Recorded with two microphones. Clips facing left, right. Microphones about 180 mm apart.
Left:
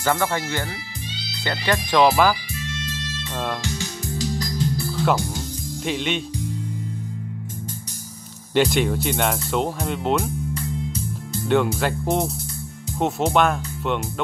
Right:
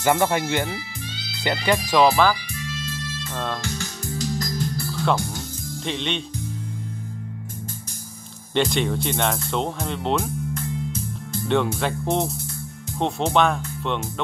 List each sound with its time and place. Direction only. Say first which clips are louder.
0.0 s speech: right 2 dB; 20° right (ahead or behind)
2.0 s speech: left 1 dB; 5° left (ahead or behind)
3.3 s music: left 2 dB; 5° left (ahead or behind)
5.9 s speech: left 3 dB; 5° left (ahead or behind)
8.5 s speech: left 3 dB; 5° left (ahead or behind)